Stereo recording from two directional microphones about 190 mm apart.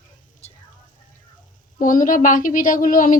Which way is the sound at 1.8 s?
45° left (ahead or behind).